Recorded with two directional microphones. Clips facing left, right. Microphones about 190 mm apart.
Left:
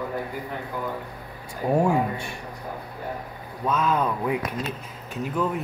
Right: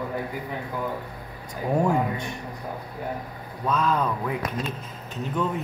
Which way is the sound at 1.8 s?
10° left (ahead or behind).